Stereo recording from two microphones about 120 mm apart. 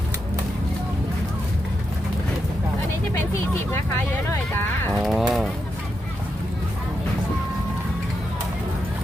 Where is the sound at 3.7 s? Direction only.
20° left (ahead or behind).